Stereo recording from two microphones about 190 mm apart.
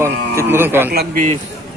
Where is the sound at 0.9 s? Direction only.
50° right (ahead or behind).